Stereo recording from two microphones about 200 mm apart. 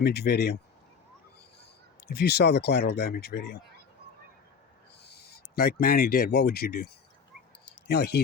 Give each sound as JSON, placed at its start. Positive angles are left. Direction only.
{"t": 0.0, "sound": "speech", "side_deg": 55}
{"t": 2.0, "sound": "speech", "side_deg": 55}
{"t": 5.0, "sound": "speech", "side_deg": 50}
{"t": 7.6, "sound": "a sound", "side_deg": 55}